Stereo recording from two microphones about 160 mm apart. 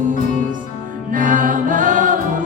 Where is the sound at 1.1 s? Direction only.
55° right (ahead or behind).